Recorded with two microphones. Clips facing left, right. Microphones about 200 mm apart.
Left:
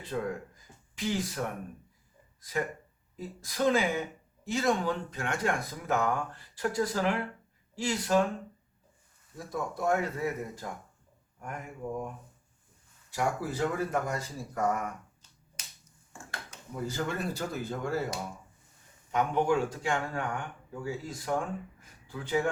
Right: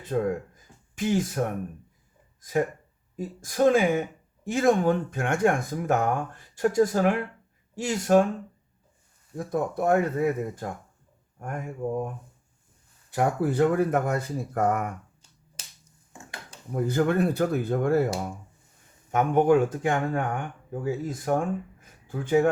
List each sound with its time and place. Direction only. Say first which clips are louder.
0.0 s speech: right 7 dB; 45° right (ahead or behind)
9.3 s speech: right 8 dB; 55° right (ahead or behind)
16.7 s speech: right 10 dB; 55° right (ahead or behind)
19.1 s speech: right 7 dB; 50° right (ahead or behind)